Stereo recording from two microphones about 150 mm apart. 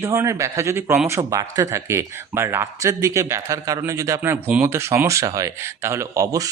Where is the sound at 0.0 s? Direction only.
20° right (ahead or behind).